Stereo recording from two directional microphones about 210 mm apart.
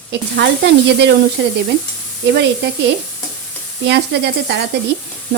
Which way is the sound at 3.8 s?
55° right (ahead or behind).